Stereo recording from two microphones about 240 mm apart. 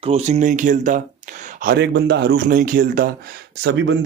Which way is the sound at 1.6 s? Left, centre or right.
Right.